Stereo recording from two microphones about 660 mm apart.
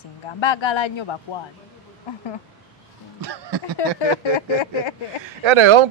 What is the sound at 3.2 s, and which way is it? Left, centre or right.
Speech, right.